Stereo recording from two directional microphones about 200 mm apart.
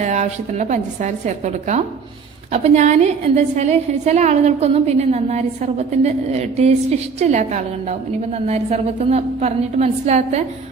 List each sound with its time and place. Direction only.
0.0 s a woman's voice: 35° right (ahead or behind)
2.5 s a woman's voice: 35° right (ahead or behind)